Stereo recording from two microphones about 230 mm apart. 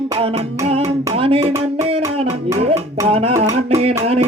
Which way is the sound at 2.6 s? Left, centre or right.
Right.